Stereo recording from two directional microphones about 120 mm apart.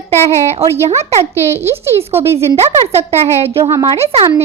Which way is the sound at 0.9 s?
60° right (ahead or behind).